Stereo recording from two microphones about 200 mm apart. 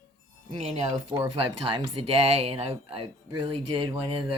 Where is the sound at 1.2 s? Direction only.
25° right (ahead or behind).